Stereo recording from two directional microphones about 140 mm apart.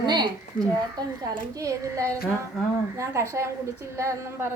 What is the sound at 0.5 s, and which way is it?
Speech, 75° left (ahead or behind).